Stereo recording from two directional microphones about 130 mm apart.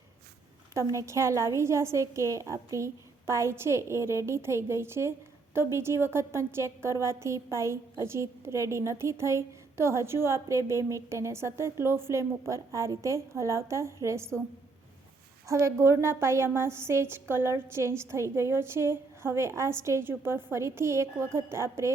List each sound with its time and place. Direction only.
0.7 s a woman's voice: 25° right (ahead or behind)
15.4 s a woman's voice: 20° right (ahead or behind)